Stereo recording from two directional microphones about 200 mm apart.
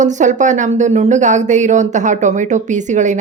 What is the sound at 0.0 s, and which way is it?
Speech, 40° right (ahead or behind).